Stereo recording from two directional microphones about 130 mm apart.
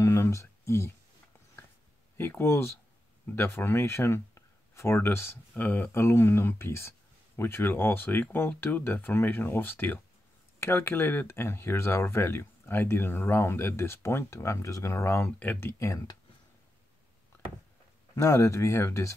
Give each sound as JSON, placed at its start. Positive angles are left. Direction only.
{"t": 0.0, "sound": "a sound", "side_deg": 25}
{"t": 2.1, "sound": "speech", "side_deg": 20}
{"t": 15.8, "sound": "speech", "side_deg": 25}
{"t": 18.1, "sound": "speech", "side_deg": 25}